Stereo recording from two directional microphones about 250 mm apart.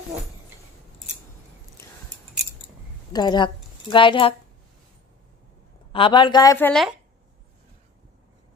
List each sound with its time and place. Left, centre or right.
3.1 s a woman's voice: centre
5.9 s a woman's voice: left; by 6.9 s centre